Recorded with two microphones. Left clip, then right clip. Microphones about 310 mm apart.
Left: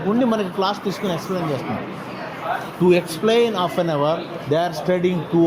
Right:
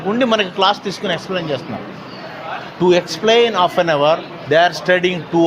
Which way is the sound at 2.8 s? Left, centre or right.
Right.